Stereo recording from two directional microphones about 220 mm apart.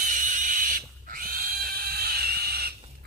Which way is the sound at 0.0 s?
35° right (ahead or behind).